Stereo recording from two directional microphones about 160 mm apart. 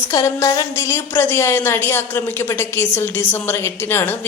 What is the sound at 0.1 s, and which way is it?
Speech, 20° left (ahead or behind).